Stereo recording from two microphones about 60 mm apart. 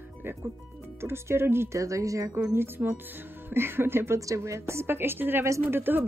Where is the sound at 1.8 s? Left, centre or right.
Right.